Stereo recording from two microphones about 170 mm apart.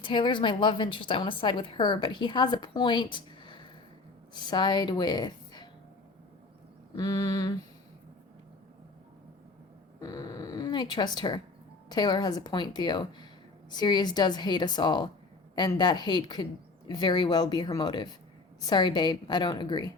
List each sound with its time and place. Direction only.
0.0 s a woman's voice: 30° left (ahead or behind)
6.9 s a woman's voice: 20° left (ahead or behind)
10.0 s a woman's voice: 20° left (ahead or behind)